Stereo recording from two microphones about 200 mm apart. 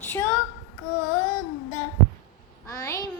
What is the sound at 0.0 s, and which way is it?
Child singing, 10° left (ahead or behind).